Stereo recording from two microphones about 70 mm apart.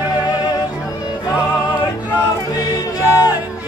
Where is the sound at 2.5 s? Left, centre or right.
Left.